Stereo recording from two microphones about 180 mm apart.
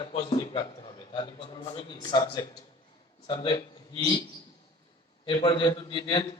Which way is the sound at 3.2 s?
25° left (ahead or behind).